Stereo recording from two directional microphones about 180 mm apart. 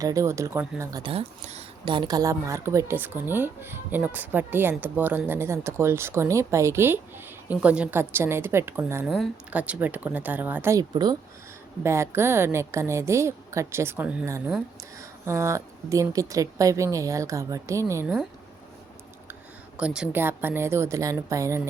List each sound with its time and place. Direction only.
0.0 s a woman's voice: 20° right (ahead or behind)
1.0 s a woman's voice: 35° right (ahead or behind); by 9.0 s 15° right (ahead or behind)
9.0 s a woman's voice: centre (ahead or behind); by 18.1 s 15° right (ahead or behind)
19.3 s a woman's voice: 5° right (ahead or behind)